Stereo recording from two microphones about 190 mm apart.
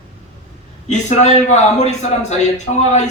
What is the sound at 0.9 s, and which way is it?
A man's voice, 35° left (ahead or behind).